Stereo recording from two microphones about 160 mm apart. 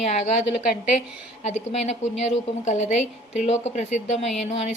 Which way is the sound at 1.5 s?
45° left (ahead or behind).